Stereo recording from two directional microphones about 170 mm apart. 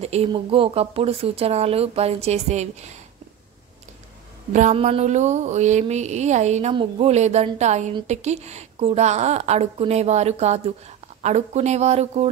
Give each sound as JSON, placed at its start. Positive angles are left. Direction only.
{"t": 0.0, "sound": "speech", "side_deg": -40}
{"t": 4.5, "sound": "a sound", "side_deg": -45}
{"t": 6.7, "sound": "speech", "side_deg": -30}